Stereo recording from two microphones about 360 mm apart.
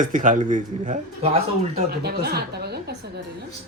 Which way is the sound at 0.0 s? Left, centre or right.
Right.